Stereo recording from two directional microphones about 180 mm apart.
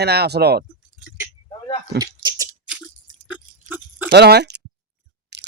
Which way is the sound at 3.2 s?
10° right (ahead or behind).